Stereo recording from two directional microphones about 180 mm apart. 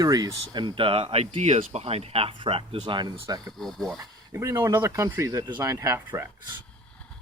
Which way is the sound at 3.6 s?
Centre (ahead or behind).